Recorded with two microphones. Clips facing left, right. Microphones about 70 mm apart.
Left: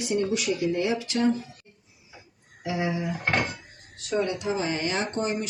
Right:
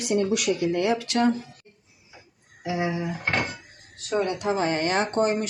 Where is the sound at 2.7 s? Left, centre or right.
Centre.